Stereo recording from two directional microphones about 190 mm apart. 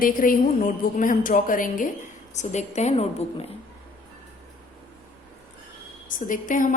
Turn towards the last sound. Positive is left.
turn(degrees=45)  # may be behind; listen again after turning